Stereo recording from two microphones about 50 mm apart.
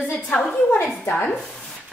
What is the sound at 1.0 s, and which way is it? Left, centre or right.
Speech, left.